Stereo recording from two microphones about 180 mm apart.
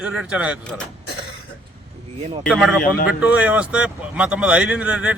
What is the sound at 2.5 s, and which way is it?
A man's voice, centre (ahead or behind).